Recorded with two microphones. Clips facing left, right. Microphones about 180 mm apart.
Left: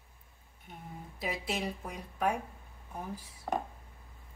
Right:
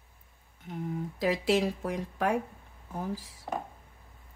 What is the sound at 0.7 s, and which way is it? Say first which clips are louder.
Speech: right 12 dB; 90° right.